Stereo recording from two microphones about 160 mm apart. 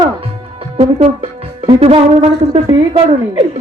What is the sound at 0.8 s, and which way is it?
Music, 40° right (ahead or behind).